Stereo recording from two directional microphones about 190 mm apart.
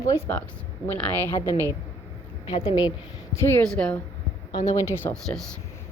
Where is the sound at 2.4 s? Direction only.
25° left (ahead or behind).